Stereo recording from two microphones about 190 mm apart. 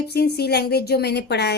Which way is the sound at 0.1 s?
55° left (ahead or behind).